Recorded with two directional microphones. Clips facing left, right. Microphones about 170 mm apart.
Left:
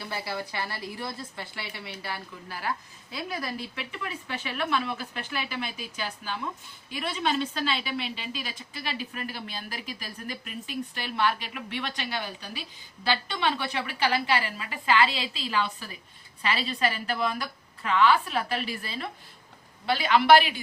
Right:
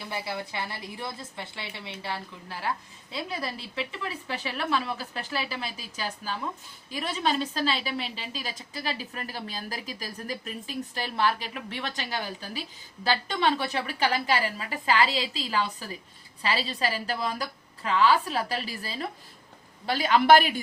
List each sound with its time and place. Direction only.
0.1 s a woman's voice: 20° right (ahead or behind); by 20.5 s 45° right (ahead or behind)